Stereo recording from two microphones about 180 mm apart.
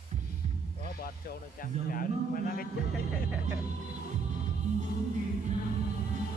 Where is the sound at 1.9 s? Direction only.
50° left (ahead or behind).